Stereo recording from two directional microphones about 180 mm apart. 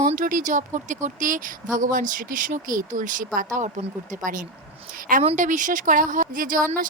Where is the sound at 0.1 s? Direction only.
50° right (ahead or behind).